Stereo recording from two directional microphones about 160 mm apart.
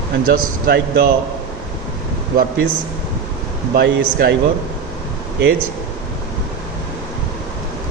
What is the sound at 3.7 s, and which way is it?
Speech, 75° right (ahead or behind).